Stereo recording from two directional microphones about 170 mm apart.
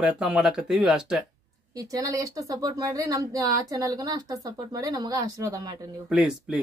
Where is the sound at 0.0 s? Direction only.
5° right (ahead or behind).